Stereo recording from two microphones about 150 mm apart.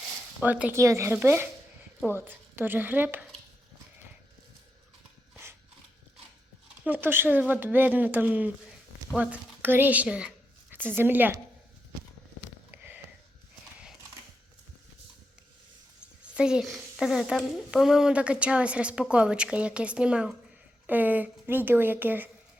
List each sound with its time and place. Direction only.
0.4 s speech: 10° right (ahead or behind)
6.8 s a woman's voice: 10° right (ahead or behind)
12.7 s a sound: 10° right (ahead or behind)
16.2 s speech: 5° right (ahead or behind)